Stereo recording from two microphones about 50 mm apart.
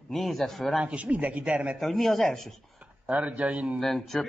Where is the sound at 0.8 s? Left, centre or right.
Right.